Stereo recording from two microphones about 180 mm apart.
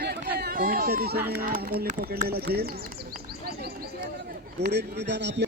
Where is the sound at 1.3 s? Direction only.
55° right (ahead or behind).